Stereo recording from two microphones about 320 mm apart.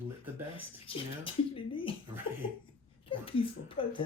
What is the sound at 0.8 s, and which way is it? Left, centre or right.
Speech, centre.